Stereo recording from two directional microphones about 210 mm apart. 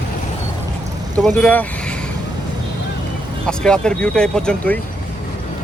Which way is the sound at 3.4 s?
5° left (ahead or behind).